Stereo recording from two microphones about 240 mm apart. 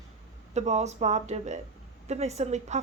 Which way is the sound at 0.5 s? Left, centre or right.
Right.